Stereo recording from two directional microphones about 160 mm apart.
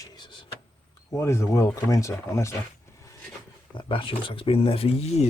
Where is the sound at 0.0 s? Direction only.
25° left (ahead or behind).